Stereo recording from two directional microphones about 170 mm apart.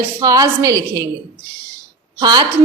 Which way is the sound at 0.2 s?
20° right (ahead or behind).